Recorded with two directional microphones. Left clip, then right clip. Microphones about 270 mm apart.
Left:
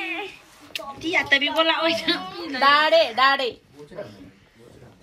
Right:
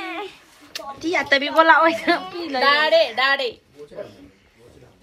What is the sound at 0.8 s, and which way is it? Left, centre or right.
Speech, centre.